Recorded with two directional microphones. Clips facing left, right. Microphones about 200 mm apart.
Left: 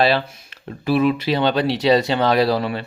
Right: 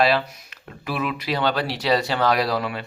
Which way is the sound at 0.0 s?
30° left (ahead or behind).